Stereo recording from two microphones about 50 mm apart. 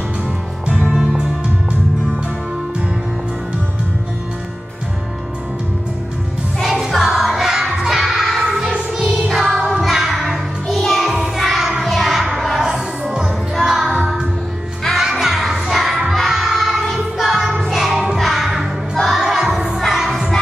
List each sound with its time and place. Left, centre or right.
0.9 s music: centre
6.6 s music: centre
8.7 s music: right
9.3 s music: centre
10.9 s child singing: centre
12.4 s music: centre
15.7 s child singing: centre
16.3 s music: centre
17.9 s music: centre